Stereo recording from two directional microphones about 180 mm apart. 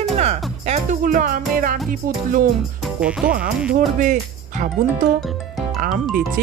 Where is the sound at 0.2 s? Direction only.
35° right (ahead or behind).